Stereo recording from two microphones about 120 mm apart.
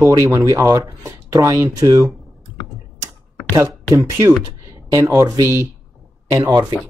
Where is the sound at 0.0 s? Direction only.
25° right (ahead or behind).